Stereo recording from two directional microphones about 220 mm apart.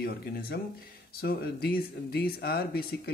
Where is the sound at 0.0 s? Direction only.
45° left (ahead or behind).